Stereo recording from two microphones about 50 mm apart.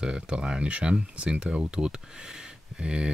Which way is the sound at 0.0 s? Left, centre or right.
Centre.